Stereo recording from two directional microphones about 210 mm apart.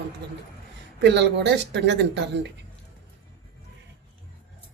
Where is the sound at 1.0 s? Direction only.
55° right (ahead or behind).